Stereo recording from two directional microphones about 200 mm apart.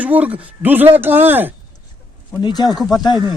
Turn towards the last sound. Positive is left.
turn(degrees=20)  # may be behind; listen again after turning